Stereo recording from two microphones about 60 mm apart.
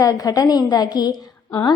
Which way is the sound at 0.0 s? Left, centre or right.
Left.